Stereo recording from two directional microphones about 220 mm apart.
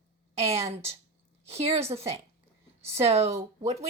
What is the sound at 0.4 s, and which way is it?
A woman's voice, 30° right (ahead or behind).